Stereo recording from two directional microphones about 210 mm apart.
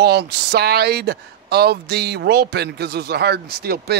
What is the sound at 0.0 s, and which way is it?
Speech, 50° right (ahead or behind).